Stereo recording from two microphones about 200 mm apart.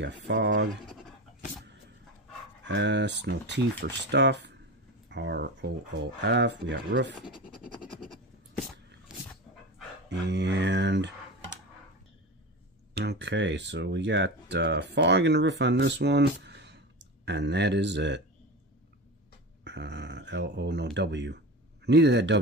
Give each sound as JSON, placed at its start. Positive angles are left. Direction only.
{"t": 0.0, "sound": "speech", "side_deg": -60}
{"t": 2.6, "sound": "speech", "side_deg": -60}
{"t": 7.2, "sound": "speech", "side_deg": -5}
{"t": 7.6, "sound": "scratch", "side_deg": -5}
{"t": 10.0, "sound": "speech", "side_deg": -60}
{"t": 12.9, "sound": "speech", "side_deg": -55}
{"t": 19.6, "sound": "speech", "side_deg": -60}